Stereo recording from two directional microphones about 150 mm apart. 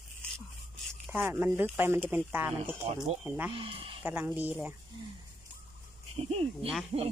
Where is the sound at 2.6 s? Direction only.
45° right (ahead or behind).